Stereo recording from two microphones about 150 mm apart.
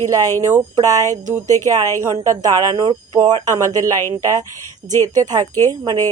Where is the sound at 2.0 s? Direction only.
25° right (ahead or behind).